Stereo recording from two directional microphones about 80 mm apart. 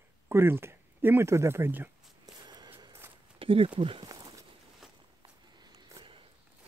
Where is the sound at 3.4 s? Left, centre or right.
Right.